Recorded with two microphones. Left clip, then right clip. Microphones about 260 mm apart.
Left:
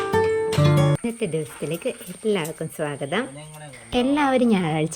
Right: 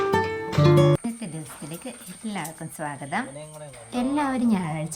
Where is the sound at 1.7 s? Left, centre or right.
Centre.